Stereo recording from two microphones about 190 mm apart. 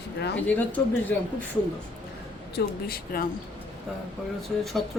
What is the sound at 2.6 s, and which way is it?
Speech, 50° left (ahead or behind).